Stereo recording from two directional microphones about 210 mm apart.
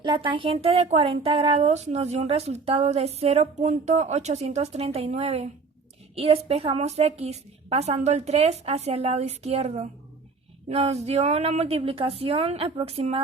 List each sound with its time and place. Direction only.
0.0 s a woman's voice: 20° right (ahead or behind)